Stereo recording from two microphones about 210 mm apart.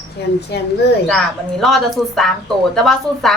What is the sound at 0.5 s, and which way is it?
Speech, 55° left (ahead or behind).